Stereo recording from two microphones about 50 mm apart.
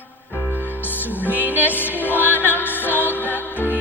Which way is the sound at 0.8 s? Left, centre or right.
Left.